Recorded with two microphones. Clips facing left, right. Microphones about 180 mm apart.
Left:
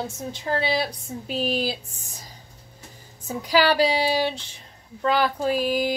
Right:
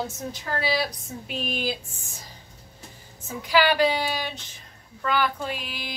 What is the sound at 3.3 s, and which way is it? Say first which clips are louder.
Speech: left 1 dB; 40° left (ahead or behind).